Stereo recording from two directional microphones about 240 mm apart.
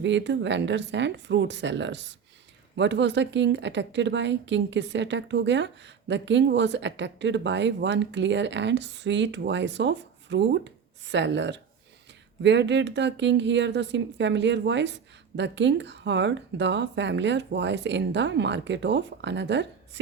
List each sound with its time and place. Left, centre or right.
0.0 s a woman's voice: right